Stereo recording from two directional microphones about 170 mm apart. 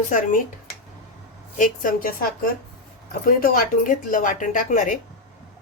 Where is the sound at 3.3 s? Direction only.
55° left (ahead or behind).